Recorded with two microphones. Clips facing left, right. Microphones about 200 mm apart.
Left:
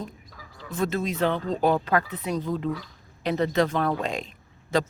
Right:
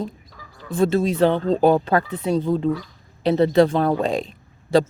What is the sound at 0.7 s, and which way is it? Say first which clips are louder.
Speech: right 8 dB; 30° right (ahead or behind).